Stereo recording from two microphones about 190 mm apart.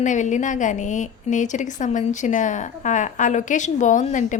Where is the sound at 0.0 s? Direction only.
40° left (ahead or behind).